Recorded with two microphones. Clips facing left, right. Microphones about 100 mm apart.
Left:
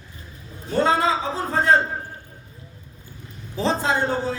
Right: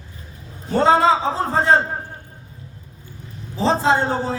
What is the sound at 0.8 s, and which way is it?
A man's voice, 25° right (ahead or behind).